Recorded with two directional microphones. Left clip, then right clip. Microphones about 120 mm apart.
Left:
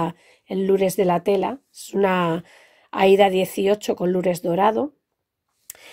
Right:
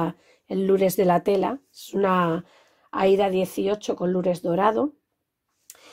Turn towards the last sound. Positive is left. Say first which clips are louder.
# left 2 dB
turn(degrees=40)  # may be behind; listen again after turning